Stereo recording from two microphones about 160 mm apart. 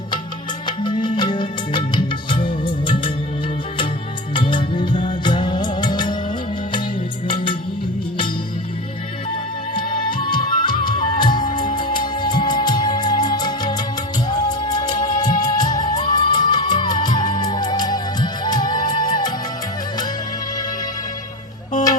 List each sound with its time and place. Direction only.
0.9 s music: 30° left (ahead or behind)
4.4 s music of bollywood: 30° left (ahead or behind)
7.3 s music: 30° left (ahead or behind)
9.7 s music: 30° left (ahead or behind)